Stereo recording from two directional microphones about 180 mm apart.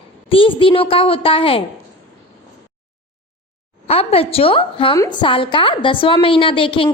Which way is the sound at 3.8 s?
35° left (ahead or behind).